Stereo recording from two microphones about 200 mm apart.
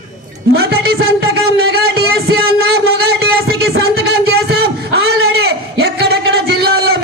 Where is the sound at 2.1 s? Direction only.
50° right (ahead or behind).